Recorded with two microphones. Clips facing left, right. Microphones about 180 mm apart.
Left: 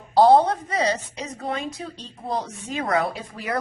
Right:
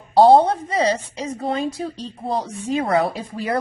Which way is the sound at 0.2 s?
30° right (ahead or behind).